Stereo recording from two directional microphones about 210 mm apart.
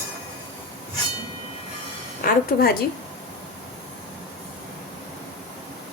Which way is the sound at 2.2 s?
45° left (ahead or behind).